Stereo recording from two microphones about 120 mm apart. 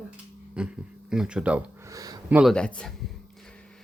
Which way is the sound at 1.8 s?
30° right (ahead or behind).